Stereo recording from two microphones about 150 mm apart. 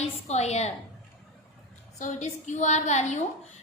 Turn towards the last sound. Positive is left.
turn(degrees=50)  # may be behind; listen again after turning